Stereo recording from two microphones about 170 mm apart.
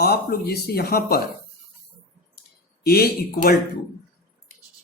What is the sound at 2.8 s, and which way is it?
Speech, 65° left (ahead or behind).